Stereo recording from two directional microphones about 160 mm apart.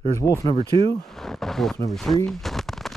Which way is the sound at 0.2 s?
20° left (ahead or behind).